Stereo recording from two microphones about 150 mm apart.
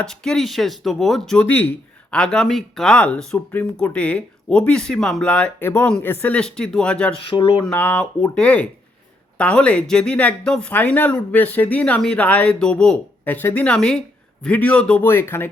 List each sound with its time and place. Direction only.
0.1 s speech: 5° left (ahead or behind)
7.2 s speech: 35° left (ahead or behind)
7.6 s speech: 10° left (ahead or behind)